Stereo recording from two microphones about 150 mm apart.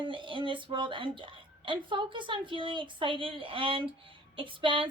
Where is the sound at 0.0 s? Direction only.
35° right (ahead or behind).